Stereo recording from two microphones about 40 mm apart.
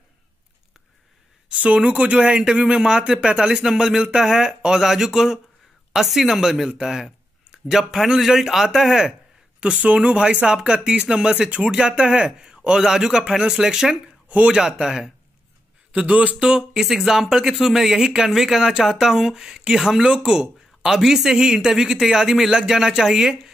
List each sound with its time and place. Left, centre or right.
1.5 s speech: right
2.3 s speech: right
9.8 s speech: right; by 13.7 s centre
14.3 s speech: right
14.8 s speech: centre
15.9 s speech: right
16.8 s speech: centre